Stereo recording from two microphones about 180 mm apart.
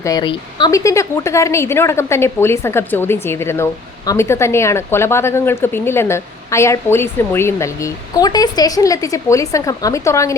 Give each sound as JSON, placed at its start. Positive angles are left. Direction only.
{"t": 0.0, "sound": "a woman's voice", "side_deg": 20}